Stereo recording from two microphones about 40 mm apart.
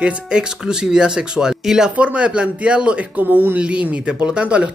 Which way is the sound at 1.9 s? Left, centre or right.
Right.